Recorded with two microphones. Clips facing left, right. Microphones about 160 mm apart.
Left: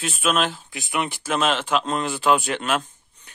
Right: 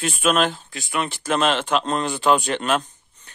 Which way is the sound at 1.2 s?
5° left (ahead or behind).